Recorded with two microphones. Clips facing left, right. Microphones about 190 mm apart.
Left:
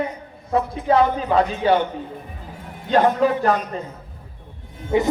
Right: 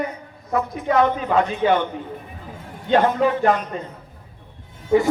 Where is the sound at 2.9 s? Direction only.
40° left (ahead or behind).